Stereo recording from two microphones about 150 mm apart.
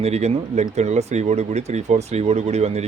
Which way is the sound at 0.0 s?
45° right (ahead or behind).